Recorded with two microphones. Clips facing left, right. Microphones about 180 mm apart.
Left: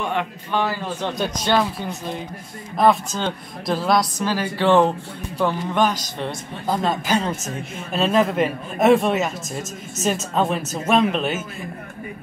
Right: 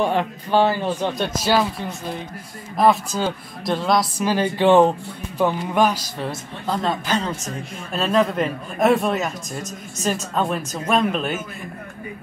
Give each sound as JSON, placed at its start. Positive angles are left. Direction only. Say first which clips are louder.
{"t": 0.0, "sound": "speech", "louder": "right 4 dB", "side_deg": -35}
{"t": 1.1, "sound": "speech", "louder": "left 3 dB", "side_deg": -5}
{"t": 4.4, "sound": "speech", "louder": "right 2 dB", "side_deg": -15}
{"t": 6.7, "sound": "a man's voice", "louder": "left 1 dB", "side_deg": 10}